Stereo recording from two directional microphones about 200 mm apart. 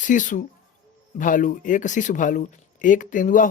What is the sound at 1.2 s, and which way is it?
Speech, 40° left (ahead or behind).